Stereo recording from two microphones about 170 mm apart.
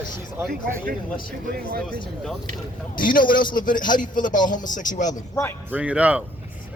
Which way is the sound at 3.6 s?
50° left (ahead or behind).